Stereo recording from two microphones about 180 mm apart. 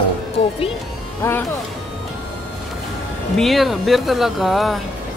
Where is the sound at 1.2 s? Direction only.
15° left (ahead or behind).